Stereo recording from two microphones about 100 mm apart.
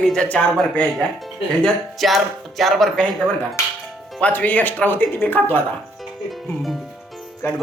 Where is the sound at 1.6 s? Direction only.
Centre (ahead or behind).